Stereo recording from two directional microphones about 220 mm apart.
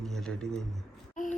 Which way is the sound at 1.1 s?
35° left (ahead or behind).